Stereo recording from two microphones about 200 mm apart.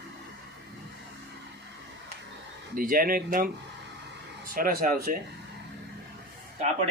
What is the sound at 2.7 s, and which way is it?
Speech, 45° right (ahead or behind).